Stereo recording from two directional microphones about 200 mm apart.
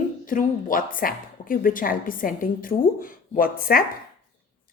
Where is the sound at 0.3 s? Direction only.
45° left (ahead or behind).